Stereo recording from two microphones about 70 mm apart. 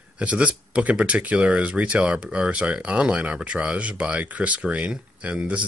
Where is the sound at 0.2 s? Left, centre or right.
Centre.